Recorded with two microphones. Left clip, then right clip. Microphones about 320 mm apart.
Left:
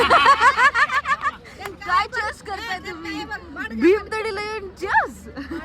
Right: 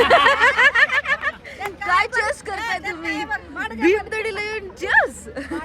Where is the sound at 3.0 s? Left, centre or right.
Centre.